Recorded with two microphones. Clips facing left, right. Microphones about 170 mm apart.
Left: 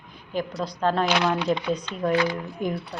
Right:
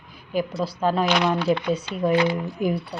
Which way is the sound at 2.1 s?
25° right (ahead or behind).